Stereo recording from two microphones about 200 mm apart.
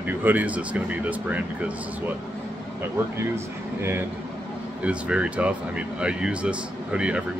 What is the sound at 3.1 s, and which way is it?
Speech, 15° right (ahead or behind).